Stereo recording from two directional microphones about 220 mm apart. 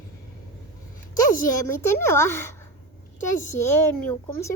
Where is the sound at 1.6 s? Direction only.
10° left (ahead or behind).